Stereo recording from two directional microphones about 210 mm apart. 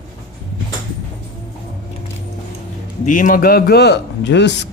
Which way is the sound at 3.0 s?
40° left (ahead or behind).